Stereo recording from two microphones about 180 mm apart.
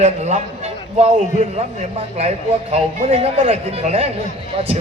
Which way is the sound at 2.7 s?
35° right (ahead or behind).